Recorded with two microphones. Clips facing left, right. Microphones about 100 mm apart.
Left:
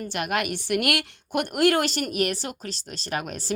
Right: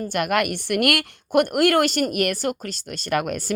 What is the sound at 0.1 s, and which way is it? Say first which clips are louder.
A woman's voice: right 5 dB; 50° right (ahead or behind).